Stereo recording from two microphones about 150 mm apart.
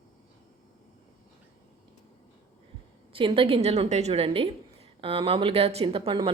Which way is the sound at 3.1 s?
35° right (ahead or behind).